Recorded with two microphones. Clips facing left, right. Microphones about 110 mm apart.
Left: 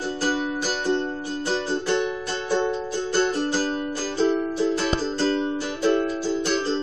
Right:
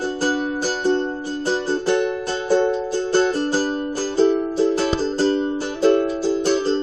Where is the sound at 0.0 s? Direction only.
40° right (ahead or behind).